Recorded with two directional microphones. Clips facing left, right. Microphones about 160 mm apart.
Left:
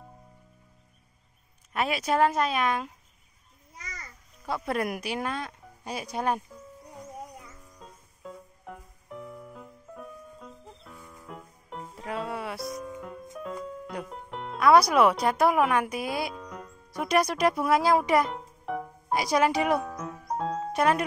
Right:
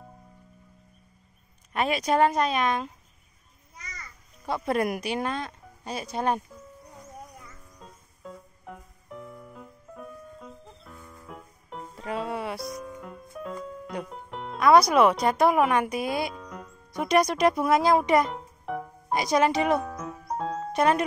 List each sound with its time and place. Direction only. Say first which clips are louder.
1.7 s speech: right 2 dB; 5° left (ahead or behind)
4.6 s speech: right 4 dB; centre (ahead or behind)
6.9 s music: left 5 dB; 15° left (ahead or behind)
7.8 s music: even; centre (ahead or behind)